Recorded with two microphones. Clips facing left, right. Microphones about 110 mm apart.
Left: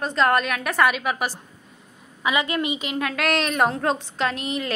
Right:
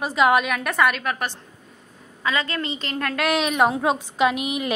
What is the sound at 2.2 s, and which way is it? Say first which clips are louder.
A woman's voice: left 2 dB; 15° left (ahead or behind).